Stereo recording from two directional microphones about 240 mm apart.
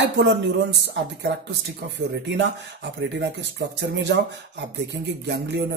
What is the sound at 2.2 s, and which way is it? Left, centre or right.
Speech, right.